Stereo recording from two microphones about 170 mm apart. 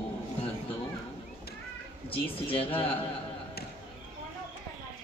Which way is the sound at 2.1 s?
30° left (ahead or behind).